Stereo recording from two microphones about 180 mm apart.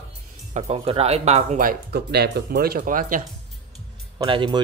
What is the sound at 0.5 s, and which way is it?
Speech, 35° right (ahead or behind).